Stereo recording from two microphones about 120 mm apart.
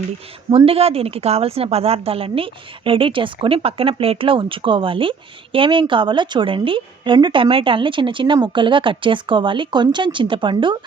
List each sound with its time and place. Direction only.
0.5 s a woman's voice: 55° right (ahead or behind)